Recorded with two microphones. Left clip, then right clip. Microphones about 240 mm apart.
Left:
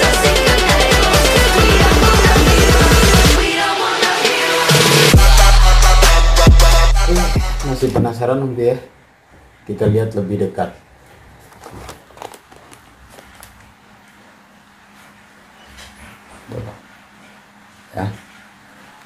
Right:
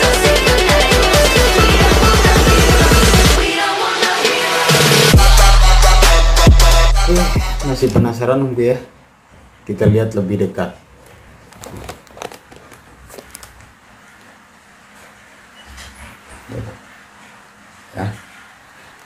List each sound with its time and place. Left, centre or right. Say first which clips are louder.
0.0 s music: even; centre
8.1 s speech: right 2 dB; centre
9.8 s speech: right 1 dB; centre
18.0 s a sound: left 1 dB; left